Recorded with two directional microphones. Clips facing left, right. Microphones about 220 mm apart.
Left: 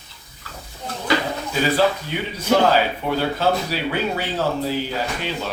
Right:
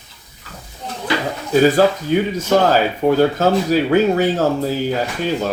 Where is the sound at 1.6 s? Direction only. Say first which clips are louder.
Right 5 dB; 45° right (ahead or behind).